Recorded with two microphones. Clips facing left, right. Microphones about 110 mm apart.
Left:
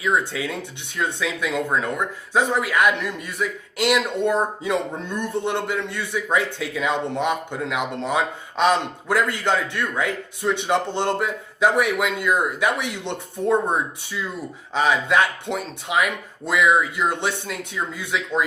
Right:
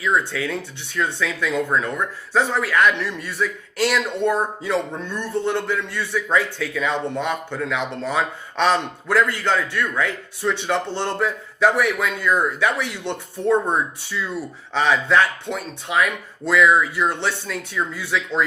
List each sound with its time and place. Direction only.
0.0 s speech: 20° left (ahead or behind)